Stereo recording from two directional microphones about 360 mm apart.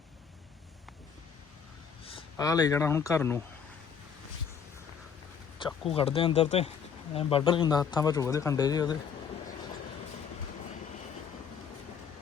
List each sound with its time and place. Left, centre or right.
2.0 s speech: centre
5.9 s speech: centre